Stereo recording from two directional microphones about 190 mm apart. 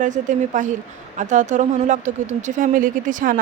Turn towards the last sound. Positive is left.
turn(degrees=-45)  # may be behind; listen again after turning